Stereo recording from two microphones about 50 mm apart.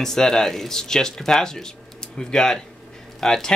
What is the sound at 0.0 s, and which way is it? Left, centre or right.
Speech, centre.